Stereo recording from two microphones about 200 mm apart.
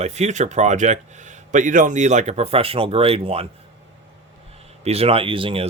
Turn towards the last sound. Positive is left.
turn(degrees=-25)  # may be behind; listen again after turning